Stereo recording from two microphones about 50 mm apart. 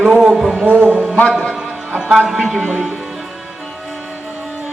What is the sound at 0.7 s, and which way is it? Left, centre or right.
Speech, right.